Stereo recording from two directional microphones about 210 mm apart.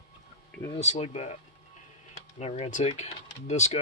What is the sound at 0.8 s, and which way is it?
Speech, 30° left (ahead or behind).